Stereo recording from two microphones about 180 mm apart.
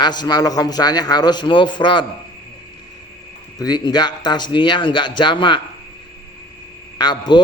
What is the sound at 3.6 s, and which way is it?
A man's voice, 25° left (ahead or behind).